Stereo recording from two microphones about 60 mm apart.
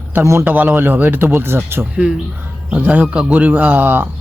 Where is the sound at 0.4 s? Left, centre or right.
Right.